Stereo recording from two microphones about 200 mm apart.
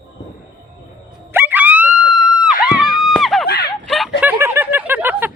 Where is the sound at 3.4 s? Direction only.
50° left (ahead or behind).